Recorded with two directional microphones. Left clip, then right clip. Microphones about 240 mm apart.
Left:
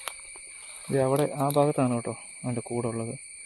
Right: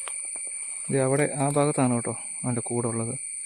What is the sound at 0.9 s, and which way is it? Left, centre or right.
Speech, centre.